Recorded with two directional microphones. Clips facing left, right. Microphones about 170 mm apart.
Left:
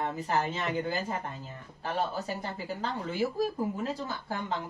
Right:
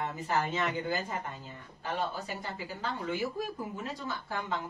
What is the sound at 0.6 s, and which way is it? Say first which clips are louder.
Speech: left 1 dB; 30° left (ahead or behind).